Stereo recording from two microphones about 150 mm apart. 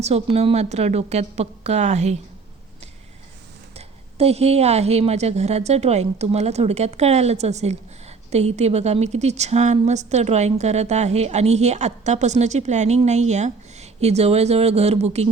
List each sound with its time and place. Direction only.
0.0 s a woman's voice: 45° right (ahead or behind)
3.8 s a woman's voice: 45° right (ahead or behind)